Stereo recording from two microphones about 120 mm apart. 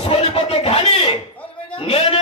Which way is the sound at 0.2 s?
55° left (ahead or behind).